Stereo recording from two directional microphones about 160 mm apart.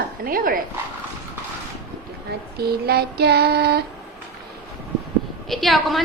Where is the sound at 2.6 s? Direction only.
75° right (ahead or behind).